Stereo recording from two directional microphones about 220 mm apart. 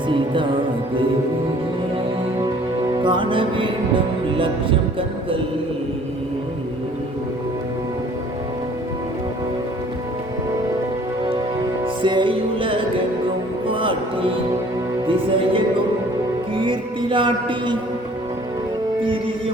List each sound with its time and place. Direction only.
2.9 s music: 20° right (ahead or behind)
12.0 s music: 20° right (ahead or behind)
15.0 s music: 25° right (ahead or behind)